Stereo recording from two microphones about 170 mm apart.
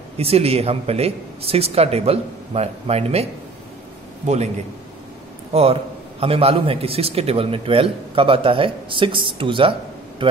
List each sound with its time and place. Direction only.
0.2 s a man's voice: 35° right (ahead or behind)
5.5 s a man's voice: 35° right (ahead or behind)